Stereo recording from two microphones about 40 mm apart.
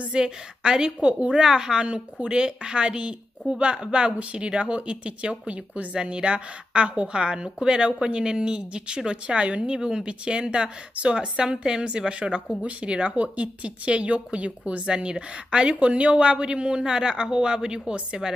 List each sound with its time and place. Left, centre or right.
0.2 s a woman's voice: centre